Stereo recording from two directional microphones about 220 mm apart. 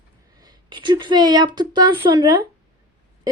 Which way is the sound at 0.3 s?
20° right (ahead or behind).